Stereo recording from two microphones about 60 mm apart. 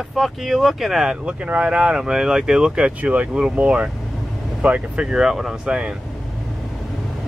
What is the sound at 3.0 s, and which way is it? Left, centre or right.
Speech, right.